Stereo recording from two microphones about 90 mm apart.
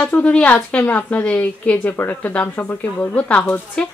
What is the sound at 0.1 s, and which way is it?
Speech, 15° left (ahead or behind).